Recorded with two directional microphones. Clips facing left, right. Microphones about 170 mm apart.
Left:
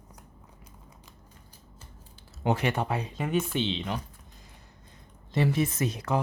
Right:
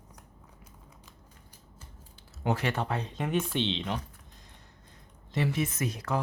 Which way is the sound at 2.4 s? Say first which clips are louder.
Left 3 dB; 20° left (ahead or behind).